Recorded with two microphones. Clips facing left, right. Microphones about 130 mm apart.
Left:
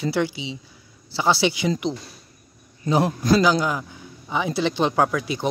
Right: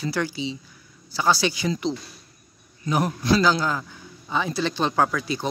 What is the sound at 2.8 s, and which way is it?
Speech, 30° left (ahead or behind).